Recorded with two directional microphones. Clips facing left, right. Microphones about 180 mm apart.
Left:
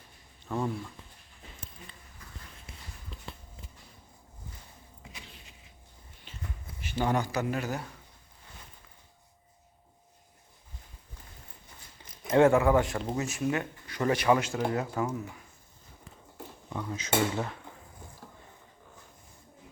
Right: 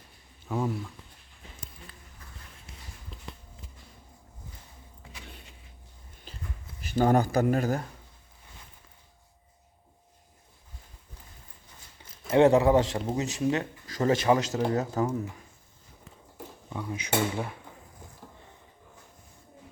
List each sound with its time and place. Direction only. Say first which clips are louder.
0.4 s speech: right 2 dB; 5° right (ahead or behind)
6.3 s a sound: right 3 dB; 35° right (ahead or behind)
6.8 s speech: right 6 dB; 45° right (ahead or behind)
12.3 s a man's voice: right 2 dB; 20° right (ahead or behind)
13.8 s a sound: right 4 dB; 40° right (ahead or behind)
14.1 s a man's voice: right 1 dB; 25° right (ahead or behind)
14.4 s speech: right 3 dB; 35° right (ahead or behind)
16.7 s speech: even; 15° right (ahead or behind)